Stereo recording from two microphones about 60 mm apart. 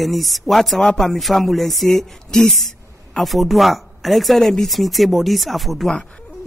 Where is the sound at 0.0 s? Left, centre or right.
Centre.